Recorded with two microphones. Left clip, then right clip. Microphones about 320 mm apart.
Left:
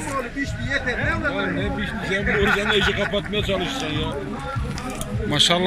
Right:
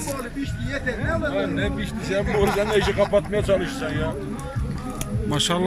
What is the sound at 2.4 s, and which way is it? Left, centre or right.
Speech, right.